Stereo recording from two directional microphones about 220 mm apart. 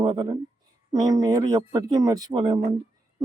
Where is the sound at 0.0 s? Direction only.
20° right (ahead or behind).